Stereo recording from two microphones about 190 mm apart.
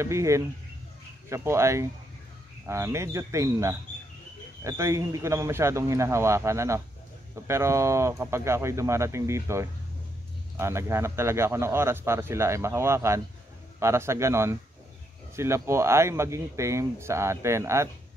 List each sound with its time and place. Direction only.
0.0 s speech: 15° right (ahead or behind)